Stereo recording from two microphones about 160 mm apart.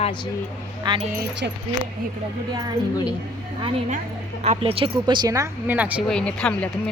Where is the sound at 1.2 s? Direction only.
90° right.